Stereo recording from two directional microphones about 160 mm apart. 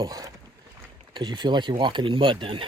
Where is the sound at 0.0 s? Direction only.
25° right (ahead or behind).